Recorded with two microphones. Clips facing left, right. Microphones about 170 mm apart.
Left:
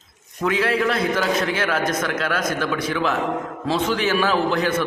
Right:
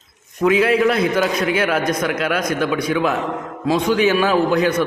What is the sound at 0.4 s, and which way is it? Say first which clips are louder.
A man's voice: right 6 dB; 20° right (ahead or behind).